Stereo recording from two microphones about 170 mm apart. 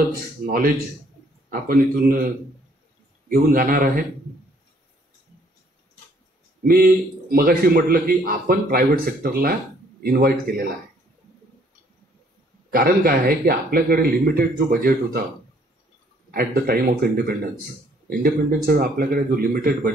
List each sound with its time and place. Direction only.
0.5 s a man's voice: 55° right (ahead or behind)
3.3 s a man's voice: 60° right (ahead or behind)
6.6 s a man's voice: 60° right (ahead or behind)
12.7 s a man's voice: 60° right (ahead or behind)
16.3 s a man's voice: 55° right (ahead or behind)